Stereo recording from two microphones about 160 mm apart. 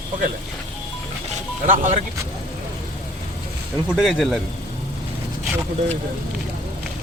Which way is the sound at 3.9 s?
Centre (ahead or behind).